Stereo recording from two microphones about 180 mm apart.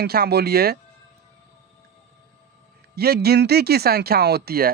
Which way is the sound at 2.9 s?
60° right (ahead or behind).